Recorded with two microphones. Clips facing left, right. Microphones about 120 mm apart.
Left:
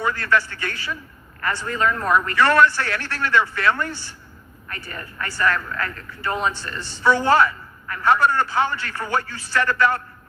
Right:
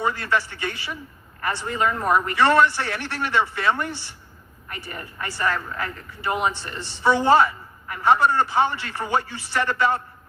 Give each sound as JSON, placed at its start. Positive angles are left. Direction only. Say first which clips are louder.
{"t": 0.1, "sound": "speech", "louder": "left 3 dB", "side_deg": -20}